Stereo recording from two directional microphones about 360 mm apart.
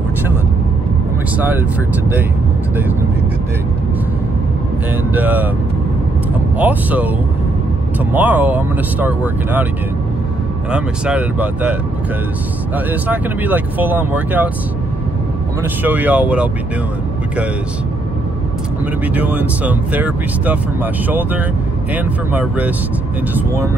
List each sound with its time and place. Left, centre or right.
5.1 s speech: centre
6.6 s speech: centre
8.1 s speech: centre
10.7 s speech: centre
12.7 s speech: centre
15.8 s speech: centre
19.1 s speech: centre